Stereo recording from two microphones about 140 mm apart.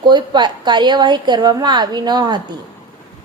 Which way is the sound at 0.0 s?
30° right (ahead or behind).